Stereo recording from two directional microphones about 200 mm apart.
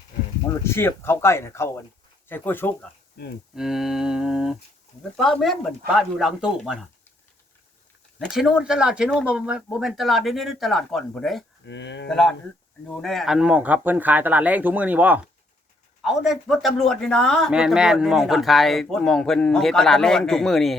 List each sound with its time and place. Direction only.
0.6 s speech: 10° left (ahead or behind)
3.5 s speech: centre (ahead or behind)
8.2 s speech: centre (ahead or behind)
11.6 s speech: 65° left (ahead or behind)
12.0 s speech: 5° left (ahead or behind)